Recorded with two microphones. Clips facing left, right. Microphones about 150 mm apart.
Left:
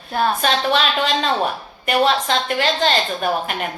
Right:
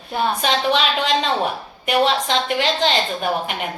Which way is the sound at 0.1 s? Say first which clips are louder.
Left 1 dB; 15° right (ahead or behind).